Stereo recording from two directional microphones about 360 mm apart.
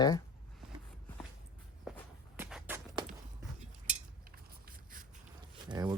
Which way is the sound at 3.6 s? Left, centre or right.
Right.